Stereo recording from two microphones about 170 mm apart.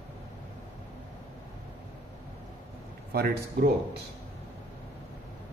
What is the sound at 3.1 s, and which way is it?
Speech, 65° right (ahead or behind).